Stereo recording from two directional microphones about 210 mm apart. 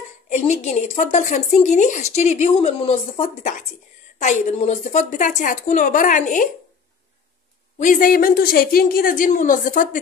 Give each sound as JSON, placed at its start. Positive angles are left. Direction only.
{"t": 0.3, "sound": "speech", "side_deg": 30}
{"t": 7.8, "sound": "a woman's voice", "side_deg": 40}